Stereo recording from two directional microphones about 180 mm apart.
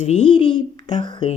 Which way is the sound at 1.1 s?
30° left (ahead or behind).